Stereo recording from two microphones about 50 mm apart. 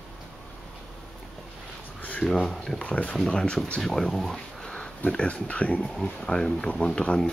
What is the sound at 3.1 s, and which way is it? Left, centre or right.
Speech, centre.